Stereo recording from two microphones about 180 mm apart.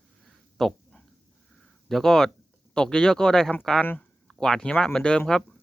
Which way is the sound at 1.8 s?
5° left (ahead or behind).